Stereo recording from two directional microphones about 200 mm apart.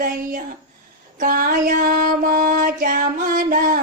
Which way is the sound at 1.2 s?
45° right (ahead or behind).